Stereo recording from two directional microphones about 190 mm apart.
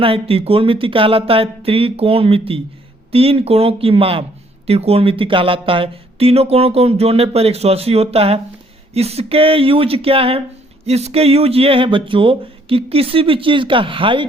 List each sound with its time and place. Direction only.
0.0 s speech: 30° right (ahead or behind)